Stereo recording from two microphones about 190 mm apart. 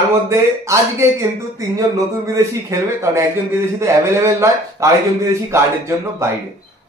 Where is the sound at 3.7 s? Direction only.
15° right (ahead or behind).